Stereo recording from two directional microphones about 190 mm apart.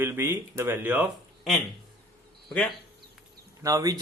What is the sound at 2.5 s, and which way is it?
Speech, centre (ahead or behind).